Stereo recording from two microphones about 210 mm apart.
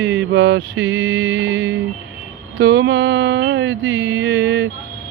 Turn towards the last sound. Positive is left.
turn(degrees=-60)  # may be behind; listen again after turning